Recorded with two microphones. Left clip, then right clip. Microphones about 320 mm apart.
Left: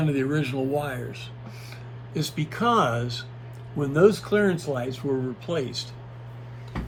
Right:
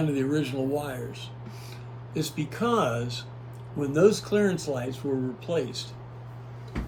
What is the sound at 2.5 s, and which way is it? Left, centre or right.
Speech, left.